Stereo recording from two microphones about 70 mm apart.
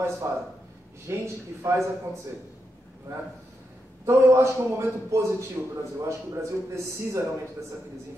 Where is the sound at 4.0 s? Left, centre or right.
Right.